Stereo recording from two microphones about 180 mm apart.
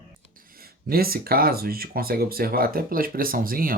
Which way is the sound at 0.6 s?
55° right (ahead or behind).